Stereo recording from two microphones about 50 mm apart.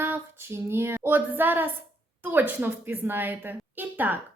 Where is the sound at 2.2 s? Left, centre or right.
Right.